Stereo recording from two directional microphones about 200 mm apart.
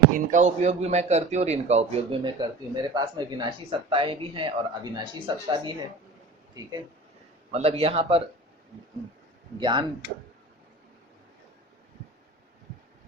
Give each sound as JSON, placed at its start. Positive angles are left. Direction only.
{"t": 0.3, "sound": "a man's voice", "side_deg": -35}
{"t": 7.5, "sound": "a man's voice", "side_deg": -30}
{"t": 9.6, "sound": "a man's voice", "side_deg": -20}